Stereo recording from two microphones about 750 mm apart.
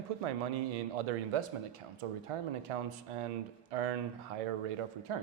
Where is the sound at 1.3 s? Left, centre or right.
Right.